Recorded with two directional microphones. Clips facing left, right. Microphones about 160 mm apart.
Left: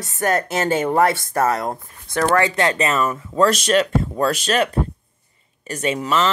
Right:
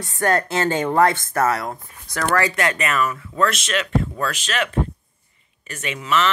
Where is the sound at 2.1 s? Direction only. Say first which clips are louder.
Left 3 dB; 25° left (ahead or behind).